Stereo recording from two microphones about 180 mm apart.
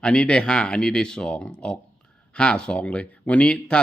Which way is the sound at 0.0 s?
5° left (ahead or behind).